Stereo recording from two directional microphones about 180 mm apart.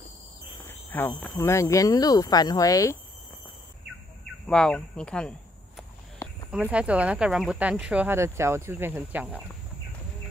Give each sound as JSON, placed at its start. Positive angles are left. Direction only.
{"t": 0.7, "sound": "speech", "side_deg": 15}
{"t": 4.5, "sound": "speech", "side_deg": 5}
{"t": 6.5, "sound": "speech", "side_deg": -5}